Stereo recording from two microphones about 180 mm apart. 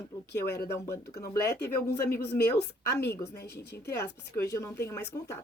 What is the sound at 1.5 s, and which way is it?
Speech, 65° left (ahead or behind).